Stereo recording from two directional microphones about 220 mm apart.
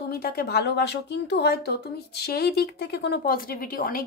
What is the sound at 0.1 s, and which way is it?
A woman's voice, 45° left (ahead or behind).